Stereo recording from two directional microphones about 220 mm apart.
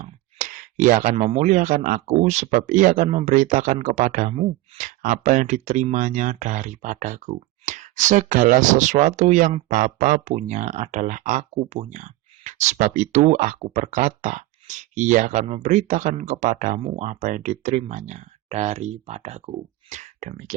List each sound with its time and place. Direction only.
0.0 s speech: 35° right (ahead or behind)